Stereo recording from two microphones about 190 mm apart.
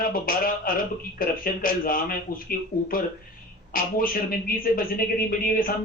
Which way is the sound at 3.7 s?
50° left (ahead or behind).